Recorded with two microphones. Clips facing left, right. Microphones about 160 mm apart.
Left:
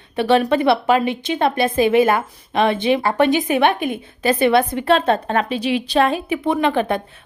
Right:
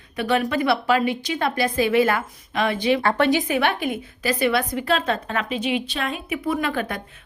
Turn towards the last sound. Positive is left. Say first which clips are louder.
# left 6 dB
turn(degrees=25)  # may be behind; listen again after turning